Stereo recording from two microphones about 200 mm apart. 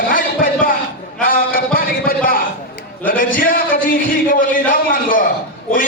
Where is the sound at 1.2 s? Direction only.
45° left (ahead or behind).